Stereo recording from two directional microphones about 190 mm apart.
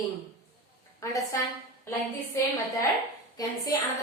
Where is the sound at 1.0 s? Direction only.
15° left (ahead or behind).